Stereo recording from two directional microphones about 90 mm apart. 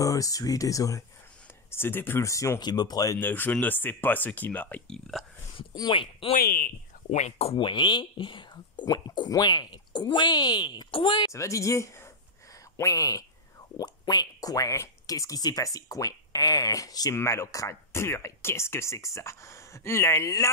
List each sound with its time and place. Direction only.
0.0 s speech: 40° left (ahead or behind)
1.7 s speech: 25° left (ahead or behind)
2.6 s speech: 50° left (ahead or behind)
3.2 s speech: 20° left (ahead or behind)
4.8 s speech: 5° left (ahead or behind)
5.8 s speech: 65° left (ahead or behind)
7.4 s speech: 65° left (ahead or behind)
11.3 s speech: 35° left (ahead or behind)
17.1 s speech: 30° left (ahead or behind)